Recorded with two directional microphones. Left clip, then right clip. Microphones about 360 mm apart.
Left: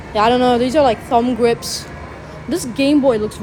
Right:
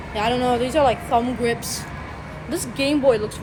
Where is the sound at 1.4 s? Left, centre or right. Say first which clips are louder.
Left 7 dB; centre.